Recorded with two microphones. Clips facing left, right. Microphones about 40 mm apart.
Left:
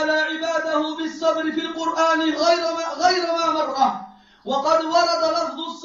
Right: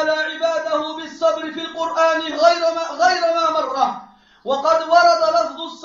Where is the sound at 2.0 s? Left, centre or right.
Right.